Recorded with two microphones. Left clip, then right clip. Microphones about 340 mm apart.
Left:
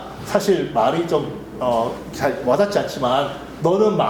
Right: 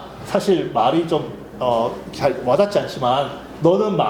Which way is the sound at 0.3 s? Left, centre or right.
Right.